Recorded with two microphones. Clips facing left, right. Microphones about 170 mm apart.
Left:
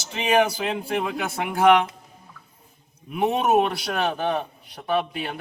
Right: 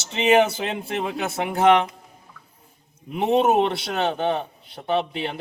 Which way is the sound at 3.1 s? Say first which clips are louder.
Right 2 dB; 25° right (ahead or behind).